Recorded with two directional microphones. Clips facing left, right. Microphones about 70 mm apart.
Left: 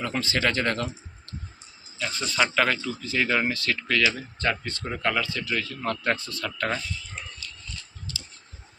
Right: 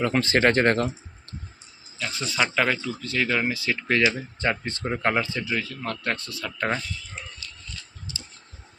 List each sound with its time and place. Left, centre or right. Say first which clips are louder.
0.0 s speech: right 5 dB; right
2.0 s speech: even; centre
3.5 s speech: right 2 dB; centre
5.6 s speech: left 2 dB; centre
8.1 s a sound: even; centre